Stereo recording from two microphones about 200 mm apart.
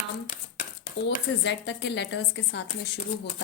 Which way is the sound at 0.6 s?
40° left (ahead or behind).